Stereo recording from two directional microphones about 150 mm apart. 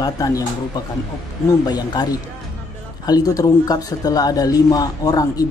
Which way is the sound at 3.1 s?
25° left (ahead or behind).